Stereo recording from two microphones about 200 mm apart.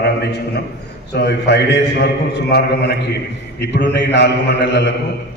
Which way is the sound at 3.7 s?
60° left (ahead or behind).